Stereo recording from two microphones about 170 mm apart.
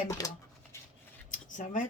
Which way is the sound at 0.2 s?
20° left (ahead or behind).